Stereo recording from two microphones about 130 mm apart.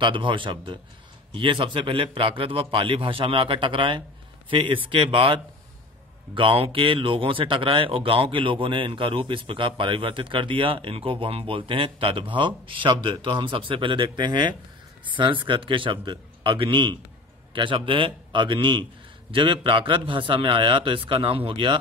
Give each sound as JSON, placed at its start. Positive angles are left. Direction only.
{"t": 0.0, "sound": "speech", "side_deg": -40}